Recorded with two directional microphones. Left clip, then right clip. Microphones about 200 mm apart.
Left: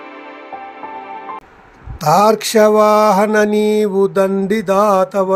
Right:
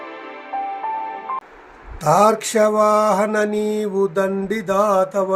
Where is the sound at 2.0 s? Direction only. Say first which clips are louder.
Left 3 dB; 45° left (ahead or behind).